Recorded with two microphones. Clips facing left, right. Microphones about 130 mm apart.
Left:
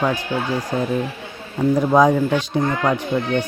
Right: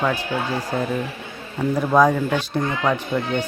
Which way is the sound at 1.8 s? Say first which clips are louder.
Left 1 dB; 15° left (ahead or behind).